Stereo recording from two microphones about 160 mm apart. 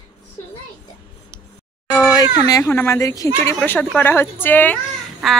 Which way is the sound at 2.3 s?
25° left (ahead or behind).